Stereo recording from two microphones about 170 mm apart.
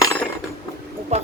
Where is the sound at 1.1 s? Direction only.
40° right (ahead or behind).